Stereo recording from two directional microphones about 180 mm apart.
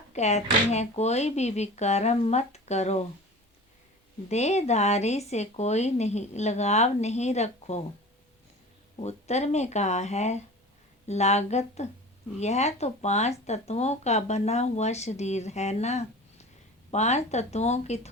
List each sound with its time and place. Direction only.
0.1 s speech: 40° left (ahead or behind)
4.3 s speech: 40° left (ahead or behind)
9.0 s speech: 35° left (ahead or behind)